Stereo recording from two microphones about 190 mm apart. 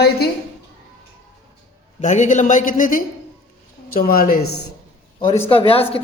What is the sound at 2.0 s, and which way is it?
A woman's voice, 40° left (ahead or behind).